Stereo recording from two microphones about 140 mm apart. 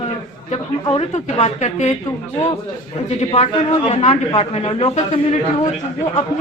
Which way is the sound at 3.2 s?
45° left (ahead or behind).